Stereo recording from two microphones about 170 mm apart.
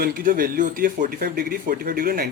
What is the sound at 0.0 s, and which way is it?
Speech, 55° right (ahead or behind).